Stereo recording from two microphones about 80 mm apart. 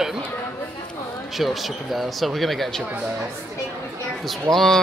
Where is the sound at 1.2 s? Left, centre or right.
Centre.